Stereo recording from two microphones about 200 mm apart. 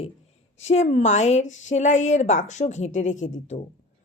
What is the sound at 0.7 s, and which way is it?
A woman's voice, 35° left (ahead or behind).